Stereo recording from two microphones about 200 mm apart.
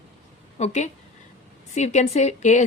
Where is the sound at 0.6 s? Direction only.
35° left (ahead or behind).